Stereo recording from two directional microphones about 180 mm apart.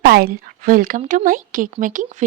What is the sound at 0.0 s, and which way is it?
Speech, 60° right (ahead or behind).